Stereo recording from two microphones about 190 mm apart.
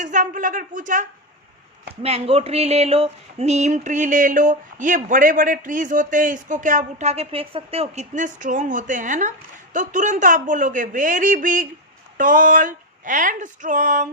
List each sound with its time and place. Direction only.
0.0 s speech: 45° right (ahead or behind)
2.0 s speech: 30° right (ahead or behind)